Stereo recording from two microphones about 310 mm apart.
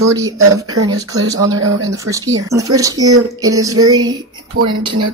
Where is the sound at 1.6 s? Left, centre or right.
Right.